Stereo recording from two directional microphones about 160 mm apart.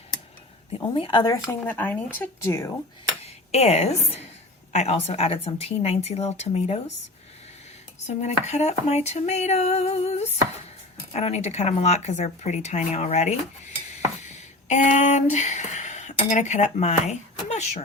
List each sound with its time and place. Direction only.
0.7 s speech: 35° left (ahead or behind); by 2.7 s 15° left (ahead or behind)
3.2 s a woman's voice: 40° left (ahead or behind)
8.0 s a sound: 45° left (ahead or behind)